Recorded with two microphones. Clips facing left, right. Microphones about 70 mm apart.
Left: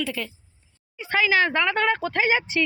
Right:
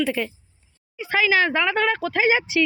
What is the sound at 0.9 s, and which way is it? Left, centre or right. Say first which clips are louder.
Speech: right 1 dB; centre.